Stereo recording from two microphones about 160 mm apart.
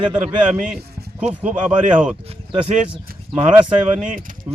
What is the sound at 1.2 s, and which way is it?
Speech, 10° right (ahead or behind).